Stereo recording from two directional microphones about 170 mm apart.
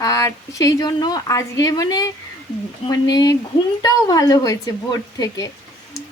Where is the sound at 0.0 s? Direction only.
20° left (ahead or behind).